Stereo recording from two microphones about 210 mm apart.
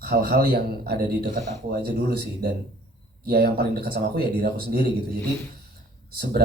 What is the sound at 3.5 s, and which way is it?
Speech, 45° right (ahead or behind).